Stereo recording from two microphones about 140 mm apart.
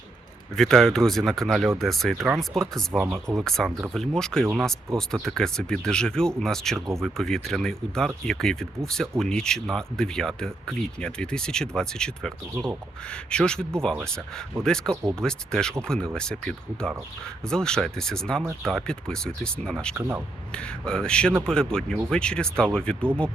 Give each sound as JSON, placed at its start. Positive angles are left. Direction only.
{"t": 0.5, "sound": "speech", "side_deg": 5}
{"t": 20.0, "sound": "speech", "side_deg": -15}
{"t": 20.5, "sound": "speech", "side_deg": 5}